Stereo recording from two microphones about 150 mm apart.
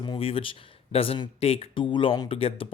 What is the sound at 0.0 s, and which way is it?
A man's voice, 35° left (ahead or behind).